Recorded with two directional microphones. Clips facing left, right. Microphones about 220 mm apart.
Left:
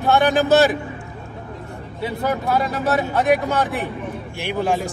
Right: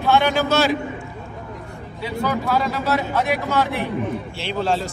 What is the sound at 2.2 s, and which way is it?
Speech, 20° left (ahead or behind).